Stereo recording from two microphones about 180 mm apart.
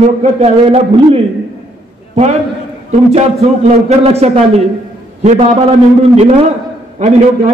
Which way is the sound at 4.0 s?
35° right (ahead or behind).